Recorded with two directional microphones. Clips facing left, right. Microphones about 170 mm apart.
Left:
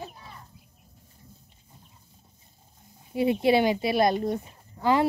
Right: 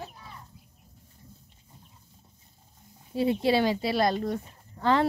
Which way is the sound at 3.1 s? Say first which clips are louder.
Left 2 dB; 20° left (ahead or behind).